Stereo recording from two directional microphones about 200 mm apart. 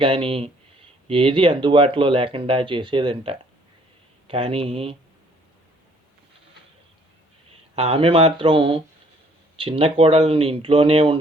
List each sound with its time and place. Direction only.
0.0 s speech: 30° right (ahead or behind)
7.8 s speech: 30° right (ahead or behind)